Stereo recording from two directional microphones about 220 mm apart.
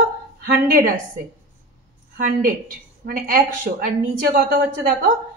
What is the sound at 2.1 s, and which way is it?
A woman's voice, 40° right (ahead or behind).